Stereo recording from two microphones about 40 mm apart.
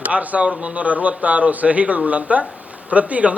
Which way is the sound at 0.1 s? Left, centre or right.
Right.